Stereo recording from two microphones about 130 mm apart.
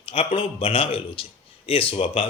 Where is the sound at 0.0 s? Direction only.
50° left (ahead or behind).